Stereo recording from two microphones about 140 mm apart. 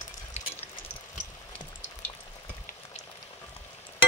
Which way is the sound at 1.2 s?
20° left (ahead or behind).